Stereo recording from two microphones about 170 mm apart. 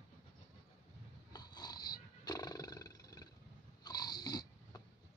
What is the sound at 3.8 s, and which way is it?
Snoring, 25° left (ahead or behind).